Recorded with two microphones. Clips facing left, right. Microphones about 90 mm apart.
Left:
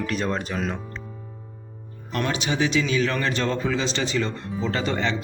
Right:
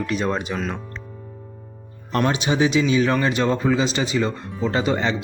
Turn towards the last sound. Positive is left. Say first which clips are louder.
# right 4 dB
turn(degrees=-15)  # may be behind; listen again after turning